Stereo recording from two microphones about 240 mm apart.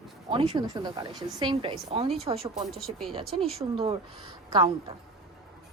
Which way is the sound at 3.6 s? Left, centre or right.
Centre.